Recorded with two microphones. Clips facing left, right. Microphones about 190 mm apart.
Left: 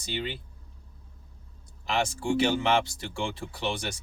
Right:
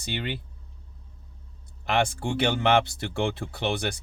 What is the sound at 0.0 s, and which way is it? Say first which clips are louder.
Speech: right 2 dB; 60° right (ahead or behind).